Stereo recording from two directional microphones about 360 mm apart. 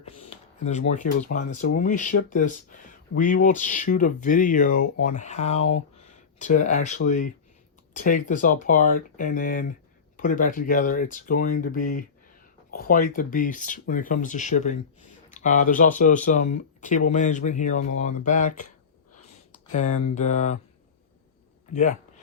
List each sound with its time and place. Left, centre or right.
0.0 s a sound: centre
0.9 s speech: left
19.7 s speech: centre
21.7 s speech: centre